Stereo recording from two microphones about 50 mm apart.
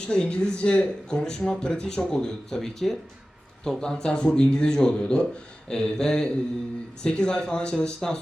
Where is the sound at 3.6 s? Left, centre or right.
Centre.